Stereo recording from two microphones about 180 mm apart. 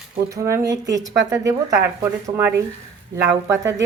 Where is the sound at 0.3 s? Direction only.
15° right (ahead or behind).